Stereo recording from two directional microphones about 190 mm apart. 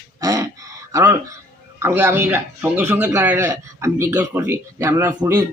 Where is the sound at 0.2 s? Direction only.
15° right (ahead or behind).